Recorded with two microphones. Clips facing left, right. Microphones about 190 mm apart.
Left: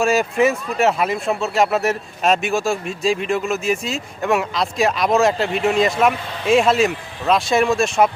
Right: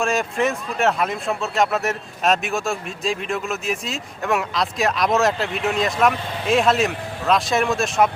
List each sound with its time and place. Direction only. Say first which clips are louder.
0.0 s speech: left 5 dB; 5° left (ahead or behind)